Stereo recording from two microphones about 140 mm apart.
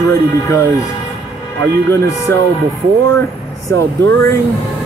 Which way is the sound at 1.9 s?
20° left (ahead or behind).